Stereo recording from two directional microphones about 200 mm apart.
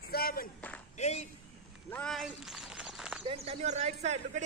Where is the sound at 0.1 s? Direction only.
50° left (ahead or behind).